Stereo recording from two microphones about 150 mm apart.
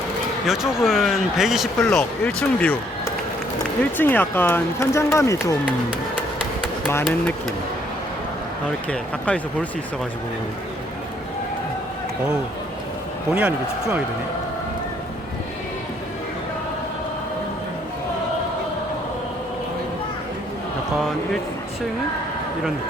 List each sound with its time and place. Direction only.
0.4 s speech: centre (ahead or behind)
1.9 s speech: 10° left (ahead or behind)
8.9 s speech: 10° left (ahead or behind)
13.3 s speech: 10° right (ahead or behind)